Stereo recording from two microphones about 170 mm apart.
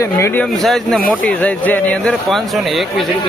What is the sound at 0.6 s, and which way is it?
Speech, centre (ahead or behind).